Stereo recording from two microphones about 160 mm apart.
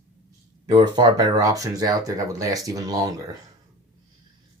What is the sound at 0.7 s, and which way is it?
Speech, 25° right (ahead or behind).